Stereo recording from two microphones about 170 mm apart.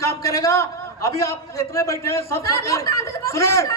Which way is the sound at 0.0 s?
20° left (ahead or behind).